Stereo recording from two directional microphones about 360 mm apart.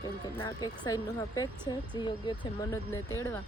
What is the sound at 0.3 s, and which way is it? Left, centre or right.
A woman's voice, centre.